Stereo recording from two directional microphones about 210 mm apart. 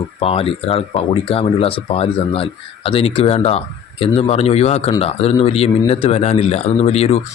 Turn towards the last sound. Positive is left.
turn(degrees=30)  # may be behind; listen again after turning